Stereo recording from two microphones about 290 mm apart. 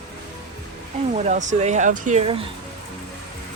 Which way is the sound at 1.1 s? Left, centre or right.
Right.